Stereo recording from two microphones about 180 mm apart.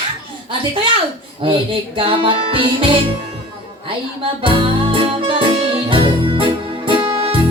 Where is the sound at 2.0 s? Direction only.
30° right (ahead or behind).